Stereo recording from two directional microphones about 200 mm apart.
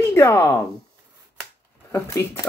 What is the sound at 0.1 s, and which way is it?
Speech, 15° left (ahead or behind).